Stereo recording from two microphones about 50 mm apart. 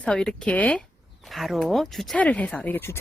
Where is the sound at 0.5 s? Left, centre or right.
Left.